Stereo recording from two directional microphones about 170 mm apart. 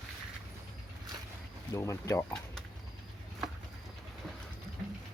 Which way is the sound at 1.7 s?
15° left (ahead or behind).